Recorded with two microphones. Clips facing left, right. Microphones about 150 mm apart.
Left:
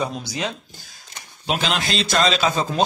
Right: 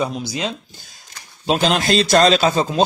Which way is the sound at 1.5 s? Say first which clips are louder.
Right 6 dB; 40° right (ahead or behind).